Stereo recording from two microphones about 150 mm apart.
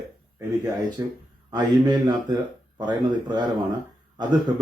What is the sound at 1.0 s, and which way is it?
Speech, 25° right (ahead or behind).